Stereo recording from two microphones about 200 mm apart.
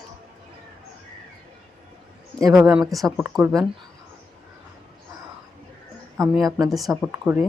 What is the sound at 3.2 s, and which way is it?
Speech, 5° right (ahead or behind).